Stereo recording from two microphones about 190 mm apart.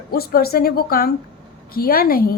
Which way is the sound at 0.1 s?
55° left (ahead or behind).